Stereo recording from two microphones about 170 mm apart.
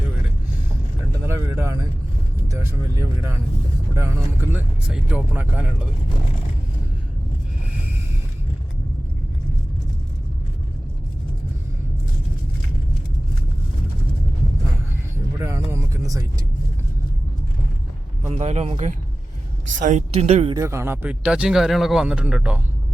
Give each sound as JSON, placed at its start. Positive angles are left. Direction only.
{"t": 1.3, "sound": "a man's voice", "side_deg": -15}
{"t": 15.4, "sound": "speech", "side_deg": -15}
{"t": 18.3, "sound": "a man's voice", "side_deg": -40}
{"t": 20.5, "sound": "a man's voice", "side_deg": -15}